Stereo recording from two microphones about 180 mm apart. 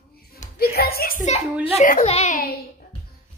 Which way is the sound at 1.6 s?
35° left (ahead or behind).